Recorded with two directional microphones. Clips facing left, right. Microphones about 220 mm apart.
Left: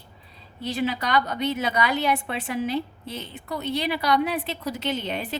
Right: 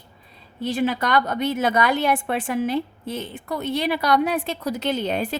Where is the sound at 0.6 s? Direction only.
50° right (ahead or behind).